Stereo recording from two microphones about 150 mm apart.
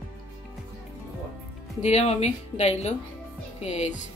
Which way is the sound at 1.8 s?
45° left (ahead or behind).